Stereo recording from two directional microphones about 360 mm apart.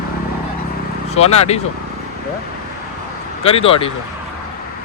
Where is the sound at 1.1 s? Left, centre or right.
Centre.